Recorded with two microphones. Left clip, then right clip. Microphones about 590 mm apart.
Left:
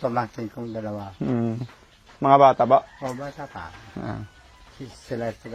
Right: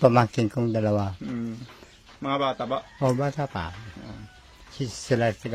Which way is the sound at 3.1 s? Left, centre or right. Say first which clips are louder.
Right 7 dB; right.